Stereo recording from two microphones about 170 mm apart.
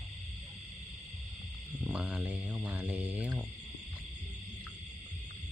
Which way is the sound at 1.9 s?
5° right (ahead or behind).